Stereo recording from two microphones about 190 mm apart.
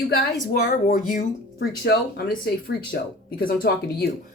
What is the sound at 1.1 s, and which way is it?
Speech, 45° left (ahead or behind).